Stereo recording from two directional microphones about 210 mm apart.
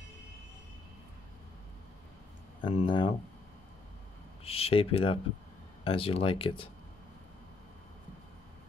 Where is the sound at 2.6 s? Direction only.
25° left (ahead or behind).